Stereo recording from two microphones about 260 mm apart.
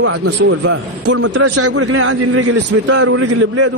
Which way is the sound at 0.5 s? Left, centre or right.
Right.